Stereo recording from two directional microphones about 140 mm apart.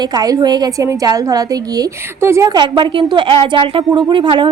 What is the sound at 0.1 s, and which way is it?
A woman's voice, 30° right (ahead or behind).